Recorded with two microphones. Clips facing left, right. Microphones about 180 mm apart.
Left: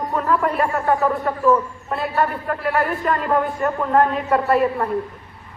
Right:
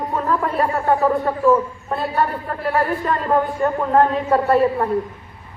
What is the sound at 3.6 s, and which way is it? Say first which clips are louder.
A woman's voice: right 2 dB; 30° right (ahead or behind).